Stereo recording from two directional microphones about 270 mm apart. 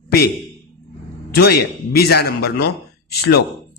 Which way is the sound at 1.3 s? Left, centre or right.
Left.